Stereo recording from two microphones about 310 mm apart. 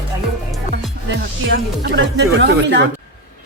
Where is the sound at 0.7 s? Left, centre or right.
Right.